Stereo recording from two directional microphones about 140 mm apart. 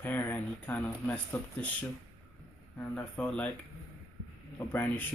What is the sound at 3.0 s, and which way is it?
Speech, 10° left (ahead or behind).